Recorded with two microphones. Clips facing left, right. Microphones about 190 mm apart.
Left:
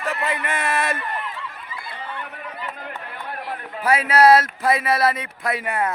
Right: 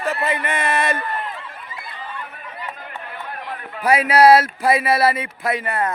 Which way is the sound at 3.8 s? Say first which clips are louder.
Right 2 dB; 15° right (ahead or behind).